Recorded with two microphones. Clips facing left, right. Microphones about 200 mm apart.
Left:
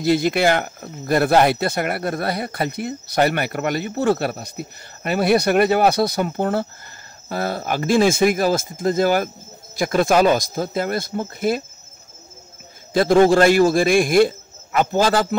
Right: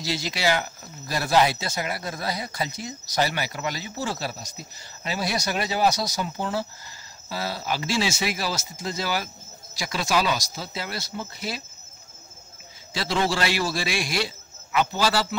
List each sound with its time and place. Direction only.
0.0 s a man's voice: 55° left (ahead or behind)
12.9 s a man's voice: 50° left (ahead or behind)